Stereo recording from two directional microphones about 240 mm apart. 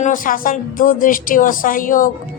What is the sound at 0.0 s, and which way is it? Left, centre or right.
Speech, left.